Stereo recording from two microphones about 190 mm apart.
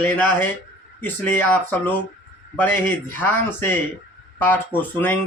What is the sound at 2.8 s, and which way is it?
Speech, 10° left (ahead or behind).